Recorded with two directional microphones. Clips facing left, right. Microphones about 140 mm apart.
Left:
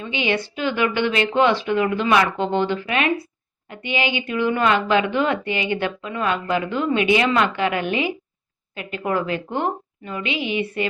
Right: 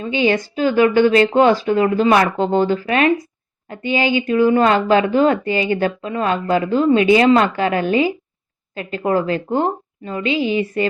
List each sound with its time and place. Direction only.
0.0 s a woman's voice: 40° right (ahead or behind)